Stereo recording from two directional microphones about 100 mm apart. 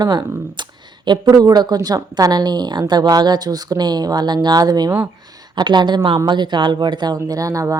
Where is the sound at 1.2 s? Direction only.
40° right (ahead or behind).